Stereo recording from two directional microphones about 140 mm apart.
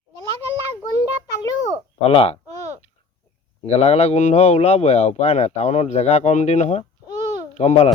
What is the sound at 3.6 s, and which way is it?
Speech, 50° left (ahead or behind).